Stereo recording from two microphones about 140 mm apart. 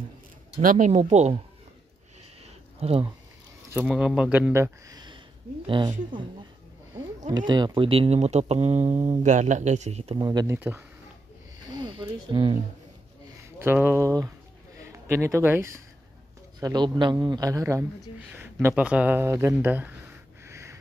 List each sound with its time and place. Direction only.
0.6 s speech: 70° right (ahead or behind)
0.9 s speech: 50° right (ahead or behind)
2.8 s speech: 45° right (ahead or behind)
3.9 s a man's voice: 5° right (ahead or behind); by 5.9 s 30° right (ahead or behind)
7.2 s a man's voice: 30° right (ahead or behind); by 10.1 s 50° right (ahead or behind)
10.1 s speech: 30° right (ahead or behind)
11.8 s speech: 30° right (ahead or behind)
13.6 s speech: 15° right (ahead or behind)
16.5 s a man's voice: 30° right (ahead or behind); by 20.0 s 15° right (ahead or behind)
20.4 s sniff: 20° right (ahead or behind)